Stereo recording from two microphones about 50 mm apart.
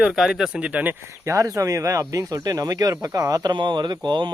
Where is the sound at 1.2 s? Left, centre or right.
Right.